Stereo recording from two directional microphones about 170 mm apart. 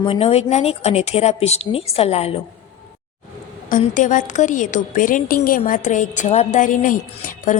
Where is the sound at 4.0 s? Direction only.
50° left (ahead or behind).